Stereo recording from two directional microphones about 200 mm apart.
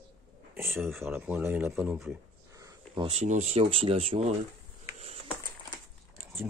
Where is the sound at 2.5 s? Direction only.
15° right (ahead or behind).